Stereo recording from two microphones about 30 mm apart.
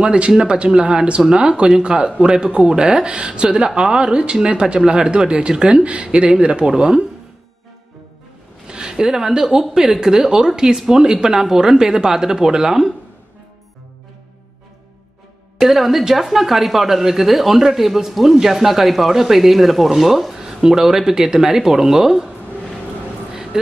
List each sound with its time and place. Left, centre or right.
0.0 s speech: right
8.6 s a sound: right
9.3 s speech: right
15.6 s a woman's voice: centre
20.3 s speech: centre
23.5 s a sound: right